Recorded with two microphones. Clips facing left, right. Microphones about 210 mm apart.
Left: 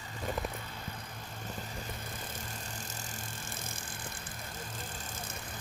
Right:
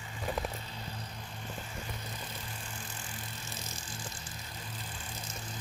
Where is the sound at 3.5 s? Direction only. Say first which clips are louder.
Even; 55° left (ahead or behind).